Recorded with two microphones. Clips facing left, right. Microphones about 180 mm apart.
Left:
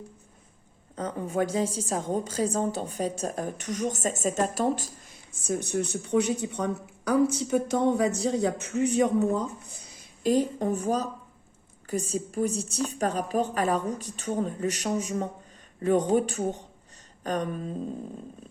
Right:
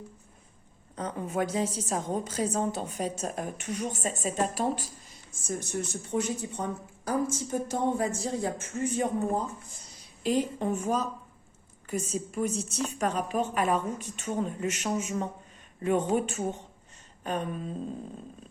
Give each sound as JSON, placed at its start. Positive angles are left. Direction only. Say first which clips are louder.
{"t": 0.9, "sound": "a woman's voice", "louder": "left 2 dB", "side_deg": 30}
{"t": 10.6, "sound": "a woman's voice", "louder": "left 2 dB", "side_deg": 35}